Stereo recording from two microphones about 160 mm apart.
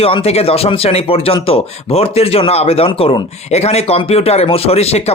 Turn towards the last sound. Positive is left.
turn(degrees=40)  # may be behind; listen again after turning